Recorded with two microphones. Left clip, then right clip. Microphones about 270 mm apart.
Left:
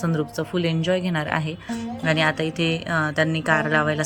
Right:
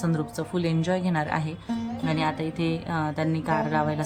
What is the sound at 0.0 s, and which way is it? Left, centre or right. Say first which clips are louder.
A woman's voice: left 4 dB; centre.